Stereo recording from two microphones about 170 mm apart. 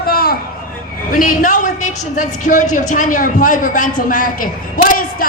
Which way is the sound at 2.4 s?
45° left (ahead or behind).